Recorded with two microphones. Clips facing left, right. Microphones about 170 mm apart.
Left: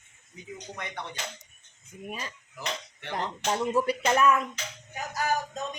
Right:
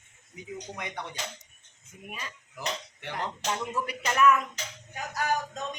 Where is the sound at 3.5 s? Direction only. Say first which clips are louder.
Left 8 dB; 30° left (ahead or behind).